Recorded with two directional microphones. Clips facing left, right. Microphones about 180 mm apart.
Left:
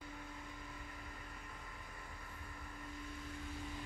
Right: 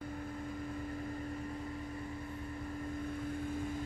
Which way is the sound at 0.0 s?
50° right (ahead or behind).